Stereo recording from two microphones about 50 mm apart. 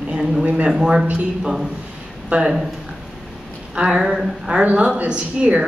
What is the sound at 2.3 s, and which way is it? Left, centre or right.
Speech, right.